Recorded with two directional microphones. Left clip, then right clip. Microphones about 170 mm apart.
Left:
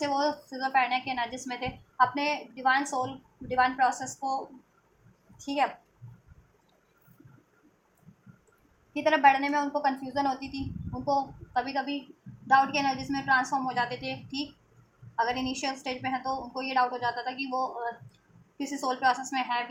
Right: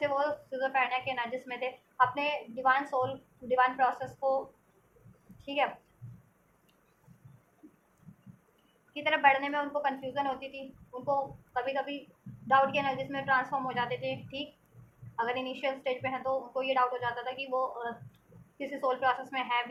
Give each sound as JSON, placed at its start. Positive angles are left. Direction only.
{"t": 0.0, "sound": "a woman's voice", "side_deg": 40}
{"t": 5.6, "sound": "a woman's voice", "side_deg": 35}
{"t": 8.9, "sound": "a woman's voice", "side_deg": 45}